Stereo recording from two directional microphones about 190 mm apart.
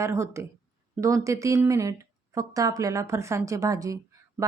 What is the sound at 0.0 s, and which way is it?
A woman's voice, 15° right (ahead or behind).